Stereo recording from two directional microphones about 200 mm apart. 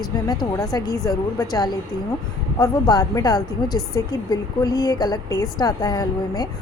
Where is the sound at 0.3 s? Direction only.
15° left (ahead or behind).